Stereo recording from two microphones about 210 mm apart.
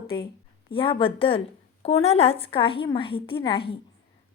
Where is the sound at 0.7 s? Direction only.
25° left (ahead or behind).